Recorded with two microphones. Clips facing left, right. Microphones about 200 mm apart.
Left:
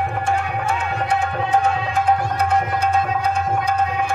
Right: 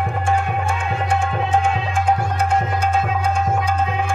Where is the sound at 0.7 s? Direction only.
50° right (ahead or behind).